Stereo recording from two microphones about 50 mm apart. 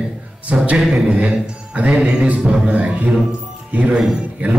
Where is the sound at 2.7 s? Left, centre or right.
Right.